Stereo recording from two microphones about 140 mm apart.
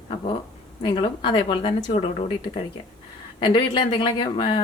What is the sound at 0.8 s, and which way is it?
Speech, 40° left (ahead or behind).